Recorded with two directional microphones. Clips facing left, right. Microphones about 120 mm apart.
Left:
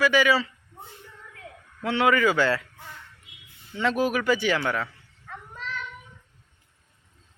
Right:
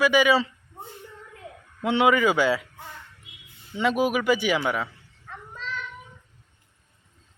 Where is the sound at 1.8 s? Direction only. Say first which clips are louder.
Right 2 dB; 20° right (ahead or behind).